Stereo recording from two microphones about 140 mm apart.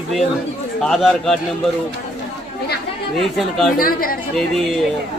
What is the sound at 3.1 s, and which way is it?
Speech, centre (ahead or behind).